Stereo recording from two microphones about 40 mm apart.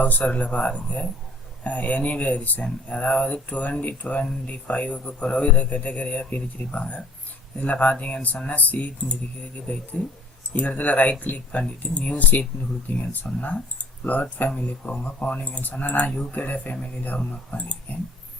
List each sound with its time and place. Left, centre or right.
0.0 s a man's voice: left